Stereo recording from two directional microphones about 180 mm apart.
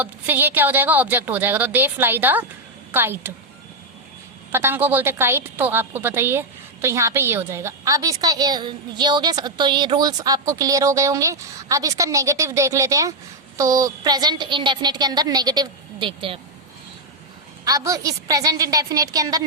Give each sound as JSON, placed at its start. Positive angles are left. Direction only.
{"t": 0.0, "sound": "a woman's voice", "side_deg": -10}
{"t": 4.5, "sound": "a woman's voice", "side_deg": -10}
{"t": 17.7, "sound": "speech", "side_deg": -20}